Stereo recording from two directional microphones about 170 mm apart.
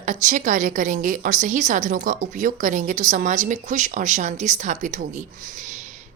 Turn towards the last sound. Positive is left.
turn(degrees=-45)  # may be behind; listen again after turning